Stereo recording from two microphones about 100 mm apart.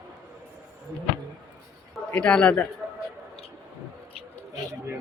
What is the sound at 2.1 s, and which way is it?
Speech, 10° left (ahead or behind).